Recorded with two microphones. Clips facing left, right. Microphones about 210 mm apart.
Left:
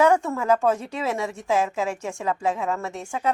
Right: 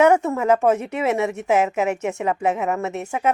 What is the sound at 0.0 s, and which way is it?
Speech, 20° right (ahead or behind).